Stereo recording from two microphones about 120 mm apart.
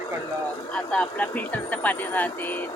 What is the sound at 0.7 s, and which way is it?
A woman's voice, 5° left (ahead or behind).